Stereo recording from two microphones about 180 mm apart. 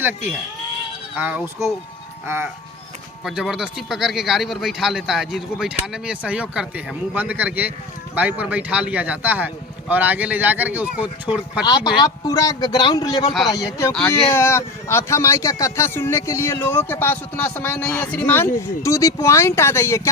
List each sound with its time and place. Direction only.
1.1 s speech: 10° right (ahead or behind)
3.2 s speech: centre (ahead or behind)
11.6 s speech: 20° left (ahead or behind)